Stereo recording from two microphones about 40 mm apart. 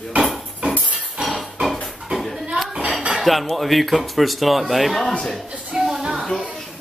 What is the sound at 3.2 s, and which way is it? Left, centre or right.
Speech, centre.